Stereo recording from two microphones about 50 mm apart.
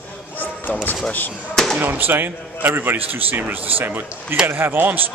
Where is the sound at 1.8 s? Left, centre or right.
Right.